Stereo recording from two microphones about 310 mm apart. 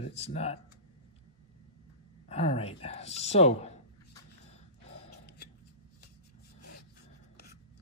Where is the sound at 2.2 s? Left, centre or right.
Centre.